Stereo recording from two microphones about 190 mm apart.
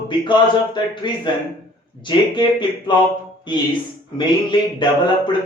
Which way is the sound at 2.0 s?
25° left (ahead or behind).